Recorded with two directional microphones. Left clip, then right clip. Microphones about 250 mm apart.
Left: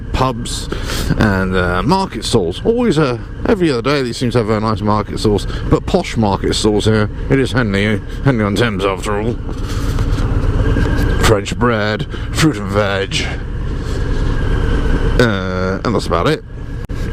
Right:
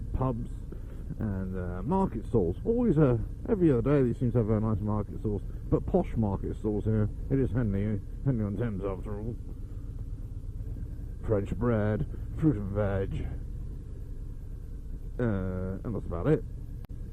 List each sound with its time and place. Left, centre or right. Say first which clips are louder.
0.1 s speech: left 17 dB; centre
6.1 s speech: left 19 dB; left
6.8 s speech: left 18 dB; centre
11.2 s speech: left 16 dB; centre
15.2 s speech: left 17 dB; centre